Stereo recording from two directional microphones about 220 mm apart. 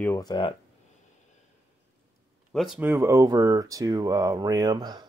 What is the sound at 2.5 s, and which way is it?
Speech, centre (ahead or behind).